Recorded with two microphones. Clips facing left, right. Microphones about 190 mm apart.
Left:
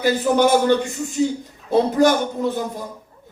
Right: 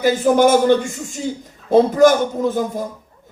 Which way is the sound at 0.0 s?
45° right (ahead or behind).